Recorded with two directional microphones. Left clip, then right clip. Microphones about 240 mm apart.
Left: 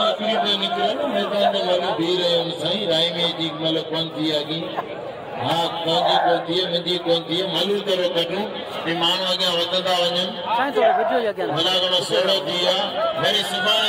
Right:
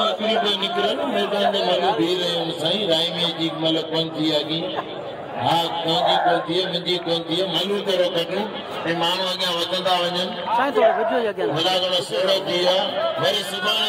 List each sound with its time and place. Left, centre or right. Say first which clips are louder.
0.2 s chatter: even; right
1.5 s a man's voice: right 1 dB; right
5.5 s a man's voice: even; right
6.0 s speech: even; centre
6.5 s a man's voice: left 1 dB; right
10.6 s speech: even; centre
11.5 s a man's voice: left 2 dB; right